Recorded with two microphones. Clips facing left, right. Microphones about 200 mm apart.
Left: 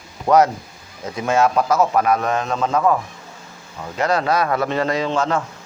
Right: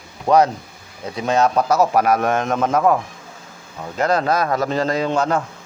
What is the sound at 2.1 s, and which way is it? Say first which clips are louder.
Speech: right 2 dB; 50° right (ahead or behind).